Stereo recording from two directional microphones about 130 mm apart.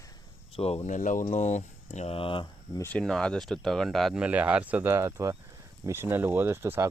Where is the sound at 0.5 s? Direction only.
50° left (ahead or behind).